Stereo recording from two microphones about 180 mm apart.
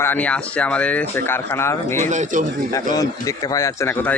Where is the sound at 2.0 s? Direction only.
45° right (ahead or behind).